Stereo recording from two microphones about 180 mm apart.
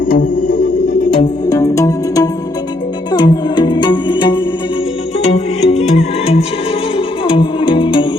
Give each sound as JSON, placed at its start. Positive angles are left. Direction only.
{"t": 0.1, "sound": "music", "side_deg": 50}
{"t": 1.2, "sound": "music", "side_deg": 20}
{"t": 5.6, "sound": "music", "side_deg": 35}